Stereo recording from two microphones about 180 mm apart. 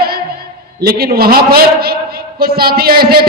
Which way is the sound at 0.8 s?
60° right (ahead or behind).